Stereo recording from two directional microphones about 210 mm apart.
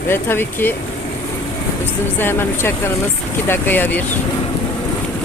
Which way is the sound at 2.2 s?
10° left (ahead or behind).